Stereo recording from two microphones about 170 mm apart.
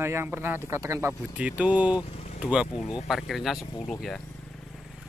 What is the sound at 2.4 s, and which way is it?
Speech, 5° right (ahead or behind).